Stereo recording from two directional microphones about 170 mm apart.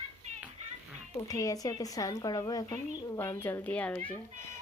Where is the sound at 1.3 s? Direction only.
20° left (ahead or behind).